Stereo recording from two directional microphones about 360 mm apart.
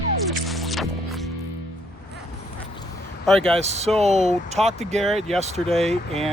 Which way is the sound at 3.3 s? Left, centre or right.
Centre.